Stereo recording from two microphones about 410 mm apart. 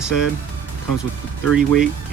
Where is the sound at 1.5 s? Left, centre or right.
Centre.